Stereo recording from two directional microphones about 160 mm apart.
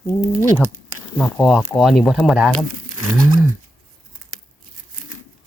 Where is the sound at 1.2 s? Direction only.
Centre (ahead or behind).